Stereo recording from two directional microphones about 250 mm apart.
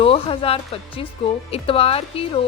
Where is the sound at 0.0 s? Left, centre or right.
Left.